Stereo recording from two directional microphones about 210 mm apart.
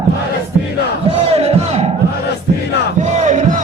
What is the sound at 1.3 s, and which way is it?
Crowd, 30° right (ahead or behind).